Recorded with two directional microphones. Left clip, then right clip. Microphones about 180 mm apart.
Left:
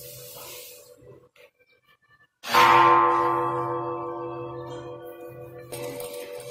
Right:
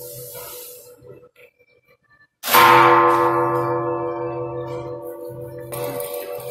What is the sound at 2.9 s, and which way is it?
Tubular bells, 30° right (ahead or behind).